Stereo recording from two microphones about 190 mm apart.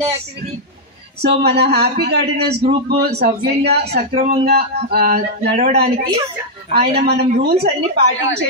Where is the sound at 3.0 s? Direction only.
60° right (ahead or behind).